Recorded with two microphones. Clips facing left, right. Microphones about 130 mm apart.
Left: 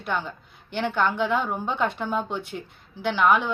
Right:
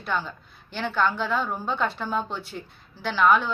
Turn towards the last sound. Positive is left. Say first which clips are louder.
# even
turn(degrees=15)  # may be behind; listen again after turning